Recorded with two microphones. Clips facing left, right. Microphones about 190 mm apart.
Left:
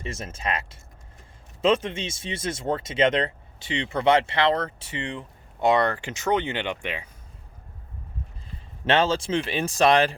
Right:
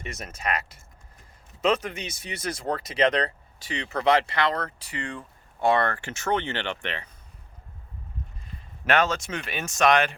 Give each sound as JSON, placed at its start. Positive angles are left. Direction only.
{"t": 0.0, "sound": "speech", "side_deg": 30}
{"t": 8.8, "sound": "speech", "side_deg": 25}